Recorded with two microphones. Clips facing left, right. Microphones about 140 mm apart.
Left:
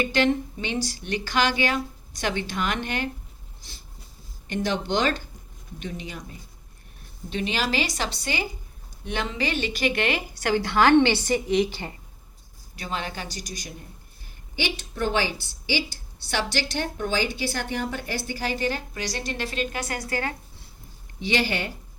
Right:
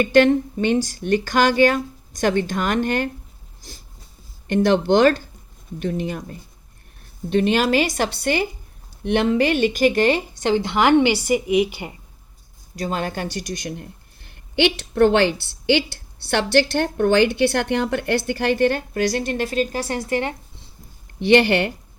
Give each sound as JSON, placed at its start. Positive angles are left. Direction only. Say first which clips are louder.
{"t": 0.0, "sound": "speech", "louder": "right 8 dB", "side_deg": -50}
{"t": 4.4, "sound": "speech", "louder": "right 10 dB", "side_deg": -55}
{"t": 10.3, "sound": "a woman's voice", "louder": "right 3 dB", "side_deg": -20}
{"t": 12.7, "sound": "a woman's voice", "louder": "right 7 dB", "side_deg": -45}
{"t": 21.2, "sound": "a woman's voice", "louder": "right 10 dB", "side_deg": -60}